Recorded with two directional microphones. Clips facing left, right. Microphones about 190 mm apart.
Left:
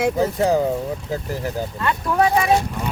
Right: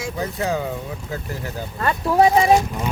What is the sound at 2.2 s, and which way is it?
Speech, 30° right (ahead or behind).